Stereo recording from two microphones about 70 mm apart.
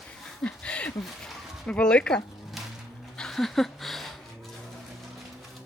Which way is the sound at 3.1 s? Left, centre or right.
Centre.